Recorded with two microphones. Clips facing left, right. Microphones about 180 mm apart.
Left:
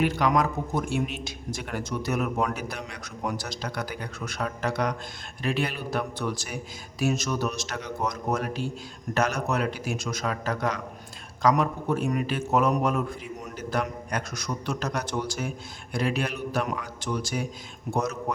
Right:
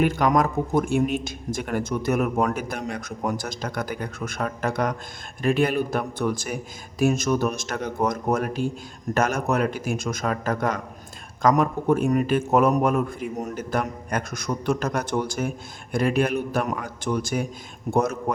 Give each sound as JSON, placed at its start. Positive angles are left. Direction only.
{"t": 0.0, "sound": "a man's voice", "side_deg": -50}